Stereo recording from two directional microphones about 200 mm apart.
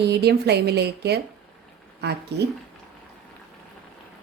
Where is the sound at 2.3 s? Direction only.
55° right (ahead or behind).